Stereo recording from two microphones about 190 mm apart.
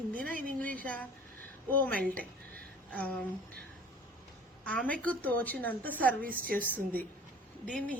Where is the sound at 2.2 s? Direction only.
5° left (ahead or behind).